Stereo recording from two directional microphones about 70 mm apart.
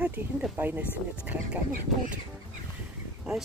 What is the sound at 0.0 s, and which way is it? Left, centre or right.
Speech, right.